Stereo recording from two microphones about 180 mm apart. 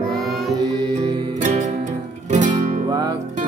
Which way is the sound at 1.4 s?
40° right (ahead or behind).